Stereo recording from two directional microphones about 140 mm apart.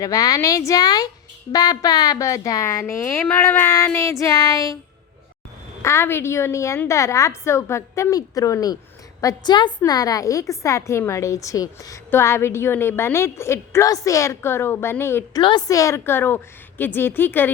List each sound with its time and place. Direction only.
0.0 s a woman's voice: 25° left (ahead or behind)
5.8 s a woman's voice: 20° left (ahead or behind)
15.4 s a woman's voice: 35° left (ahead or behind)
15.6 s a woman's voice: 25° left (ahead or behind)